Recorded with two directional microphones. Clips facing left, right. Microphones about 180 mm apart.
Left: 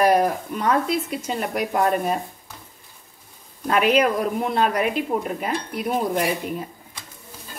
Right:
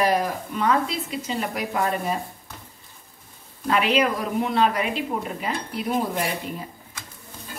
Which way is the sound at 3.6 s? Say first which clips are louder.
Left 3 dB; 45° left (ahead or behind).